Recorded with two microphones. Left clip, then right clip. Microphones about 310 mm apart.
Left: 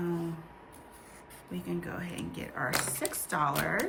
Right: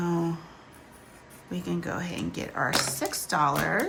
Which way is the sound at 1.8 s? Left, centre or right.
Centre.